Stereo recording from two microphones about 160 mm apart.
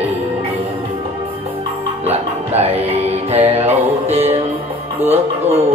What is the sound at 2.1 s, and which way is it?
Music, 40° right (ahead or behind).